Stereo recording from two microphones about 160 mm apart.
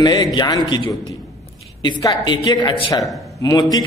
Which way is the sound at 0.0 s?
25° left (ahead or behind).